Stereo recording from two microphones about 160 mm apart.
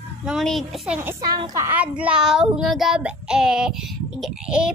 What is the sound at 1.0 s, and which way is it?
Speech, 25° right (ahead or behind).